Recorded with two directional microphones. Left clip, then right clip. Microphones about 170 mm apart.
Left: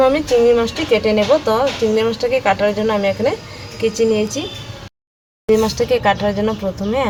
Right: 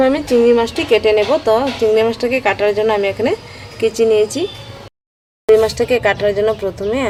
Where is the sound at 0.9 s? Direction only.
70° right (ahead or behind).